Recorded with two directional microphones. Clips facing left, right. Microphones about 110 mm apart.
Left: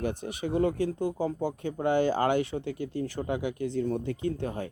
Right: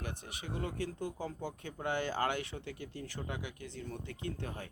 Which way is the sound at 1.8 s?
20° left (ahead or behind).